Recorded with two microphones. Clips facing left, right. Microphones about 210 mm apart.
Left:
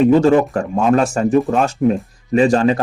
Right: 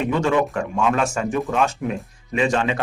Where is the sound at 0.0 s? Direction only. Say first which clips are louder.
Left 9 dB; 35° left (ahead or behind).